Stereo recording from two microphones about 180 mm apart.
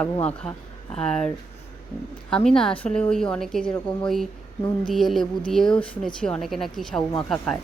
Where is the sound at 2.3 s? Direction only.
5° left (ahead or behind).